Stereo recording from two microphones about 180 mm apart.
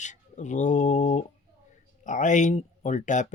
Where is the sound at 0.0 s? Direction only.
40° left (ahead or behind).